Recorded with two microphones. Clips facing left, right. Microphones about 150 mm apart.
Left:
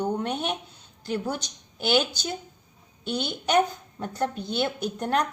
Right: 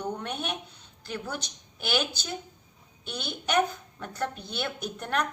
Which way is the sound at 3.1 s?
30° left (ahead or behind).